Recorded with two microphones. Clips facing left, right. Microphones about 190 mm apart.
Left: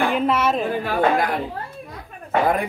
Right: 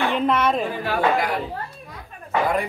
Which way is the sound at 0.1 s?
5° left (ahead or behind).